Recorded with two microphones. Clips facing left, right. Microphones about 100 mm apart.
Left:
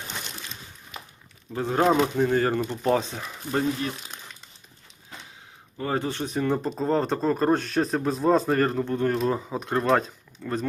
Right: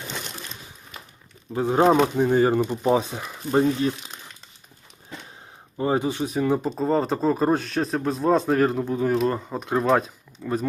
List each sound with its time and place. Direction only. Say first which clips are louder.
1.5 s speech: right 3 dB; 15° right (ahead or behind)
5.7 s a man's voice: right 4 dB; 20° right (ahead or behind)